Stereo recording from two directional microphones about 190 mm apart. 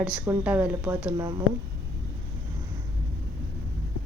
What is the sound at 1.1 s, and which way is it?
Speech, 20° right (ahead or behind).